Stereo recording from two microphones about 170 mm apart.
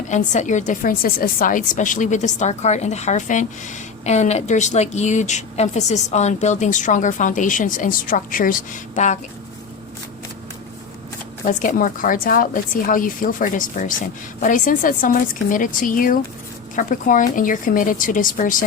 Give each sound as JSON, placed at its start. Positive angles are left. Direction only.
{"t": 0.1, "sound": "a woman's voice", "side_deg": 45}
{"t": 11.4, "sound": "a woman's voice", "side_deg": 50}